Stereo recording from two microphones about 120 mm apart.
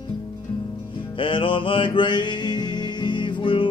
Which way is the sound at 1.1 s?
45° left (ahead or behind).